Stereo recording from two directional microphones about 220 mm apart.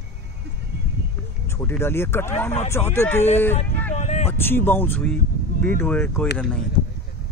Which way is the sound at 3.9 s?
30° left (ahead or behind).